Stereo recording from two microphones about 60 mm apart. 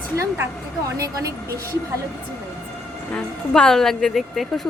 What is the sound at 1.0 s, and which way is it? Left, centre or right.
Speech, right.